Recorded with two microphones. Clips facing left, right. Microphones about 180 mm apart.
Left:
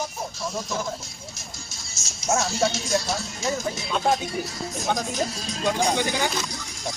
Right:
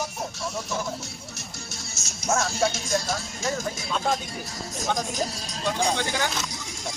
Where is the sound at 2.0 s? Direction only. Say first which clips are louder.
Right 1 dB; 65° right (ahead or behind).